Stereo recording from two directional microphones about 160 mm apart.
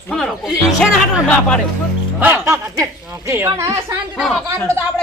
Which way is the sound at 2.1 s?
15° right (ahead or behind).